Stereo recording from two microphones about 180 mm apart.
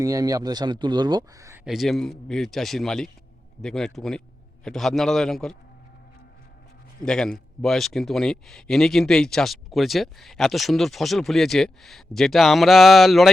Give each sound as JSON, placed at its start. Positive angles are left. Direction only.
{"t": 0.0, "sound": "speech", "side_deg": -20}
{"t": 1.6, "sound": "speech", "side_deg": 0}
{"t": 7.0, "sound": "speech", "side_deg": 5}